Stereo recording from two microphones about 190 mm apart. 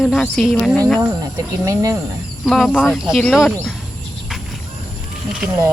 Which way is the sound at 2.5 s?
Centre (ahead or behind).